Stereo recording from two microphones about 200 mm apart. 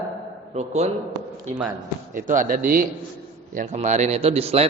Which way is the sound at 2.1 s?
40° right (ahead or behind).